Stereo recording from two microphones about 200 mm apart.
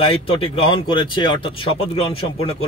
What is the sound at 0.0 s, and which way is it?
Speech, 30° left (ahead or behind).